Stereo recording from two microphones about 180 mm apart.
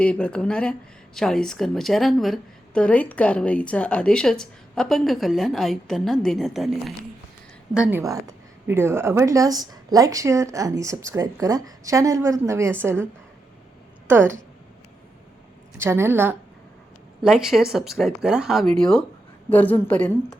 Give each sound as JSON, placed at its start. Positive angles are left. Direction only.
{"t": 0.0, "sound": "speech", "side_deg": 5}
{"t": 14.1, "sound": "speech", "side_deg": -10}
{"t": 15.8, "sound": "speech", "side_deg": -15}
{"t": 17.2, "sound": "a woman's voice", "side_deg": 0}